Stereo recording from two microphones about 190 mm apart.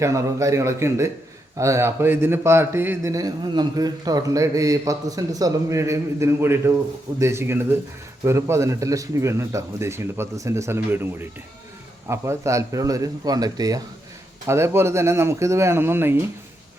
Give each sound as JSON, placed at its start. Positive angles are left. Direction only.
{"t": 0.0, "sound": "a man's voice", "side_deg": -15}